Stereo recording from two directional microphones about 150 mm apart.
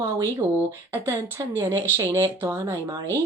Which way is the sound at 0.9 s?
15° right (ahead or behind).